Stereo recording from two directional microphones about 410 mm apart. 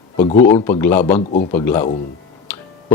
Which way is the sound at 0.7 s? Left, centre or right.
Centre.